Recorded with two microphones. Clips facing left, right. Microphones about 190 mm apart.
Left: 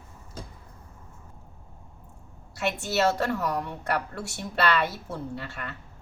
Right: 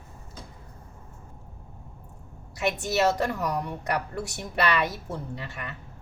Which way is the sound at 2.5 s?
15° right (ahead or behind).